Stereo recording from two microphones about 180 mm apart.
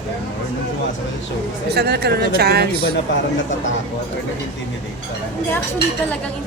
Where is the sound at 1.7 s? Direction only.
65° right (ahead or behind).